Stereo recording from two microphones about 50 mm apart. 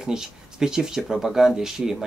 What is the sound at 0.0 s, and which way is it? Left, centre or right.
Speech, centre.